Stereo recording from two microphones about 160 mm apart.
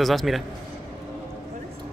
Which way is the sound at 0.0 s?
Centre (ahead or behind).